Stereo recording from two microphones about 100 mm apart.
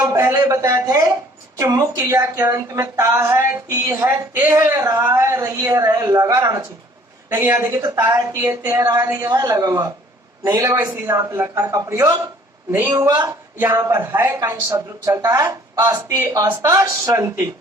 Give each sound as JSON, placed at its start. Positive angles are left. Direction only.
{"t": 0.1, "sound": "a woman's voice", "side_deg": -35}
{"t": 8.0, "sound": "a woman's voice", "side_deg": -40}
{"t": 13.1, "sound": "speech", "side_deg": -40}
{"t": 13.6, "sound": "a woman's voice", "side_deg": -30}
{"t": 14.3, "sound": "a woman's voice", "side_deg": -40}